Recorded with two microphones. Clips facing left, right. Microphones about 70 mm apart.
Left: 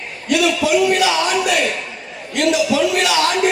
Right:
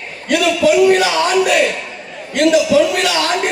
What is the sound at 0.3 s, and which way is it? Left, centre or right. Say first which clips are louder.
A man's voice: right 3 dB; right.